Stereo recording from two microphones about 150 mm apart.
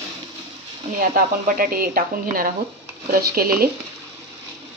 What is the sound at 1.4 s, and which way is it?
Speech, 75° right (ahead or behind).